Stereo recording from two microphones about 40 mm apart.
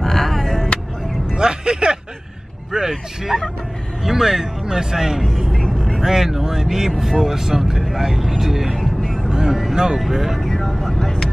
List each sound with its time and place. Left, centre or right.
0.0 s vehicle: centre
1.3 s music: centre
2.9 s speech: centre
8.7 s vehicle: centre
9.5 s speech: centre
10.5 s speech: centre